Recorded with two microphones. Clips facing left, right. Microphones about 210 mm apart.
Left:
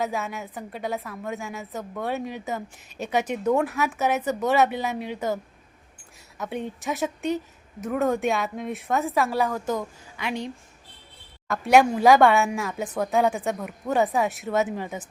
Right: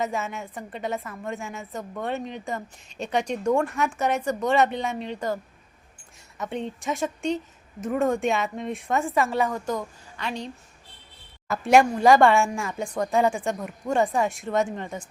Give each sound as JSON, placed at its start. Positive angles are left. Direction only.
{"t": 0.0, "sound": "a woman's voice", "side_deg": 0}
{"t": 11.4, "sound": "a woman's voice", "side_deg": 0}